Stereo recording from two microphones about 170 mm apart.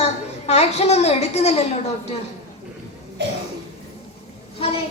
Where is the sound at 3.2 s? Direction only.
80° right.